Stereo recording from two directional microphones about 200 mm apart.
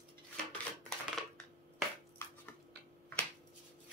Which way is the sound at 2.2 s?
10° left (ahead or behind).